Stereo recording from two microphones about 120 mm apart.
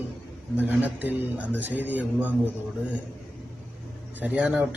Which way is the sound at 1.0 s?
15° right (ahead or behind).